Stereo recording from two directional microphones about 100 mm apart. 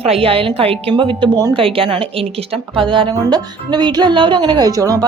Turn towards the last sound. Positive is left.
turn(degrees=-35)  # may be behind; listen again after turning